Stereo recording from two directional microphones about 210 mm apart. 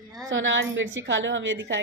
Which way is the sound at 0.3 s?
65° right (ahead or behind).